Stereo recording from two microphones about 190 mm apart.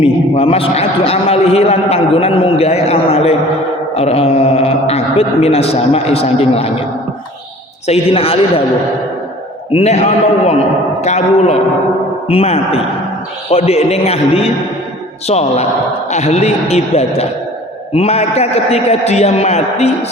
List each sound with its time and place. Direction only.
0.0 s a man's voice: 30° left (ahead or behind)
7.9 s a man's voice: 30° left (ahead or behind)
9.7 s a man's voice: 35° left (ahead or behind)